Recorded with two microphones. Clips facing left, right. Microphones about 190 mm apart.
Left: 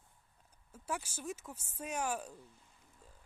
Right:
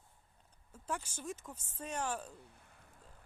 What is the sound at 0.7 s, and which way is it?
Speech, 5° left (ahead or behind).